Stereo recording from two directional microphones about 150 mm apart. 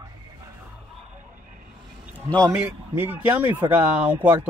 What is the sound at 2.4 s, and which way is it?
Speech, 15° right (ahead or behind).